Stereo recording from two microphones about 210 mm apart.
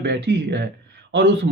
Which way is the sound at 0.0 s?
55° right (ahead or behind).